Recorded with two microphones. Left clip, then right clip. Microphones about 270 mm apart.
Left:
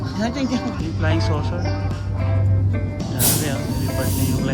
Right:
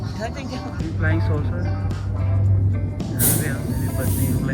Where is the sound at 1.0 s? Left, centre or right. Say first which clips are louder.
Left 2 dB; centre.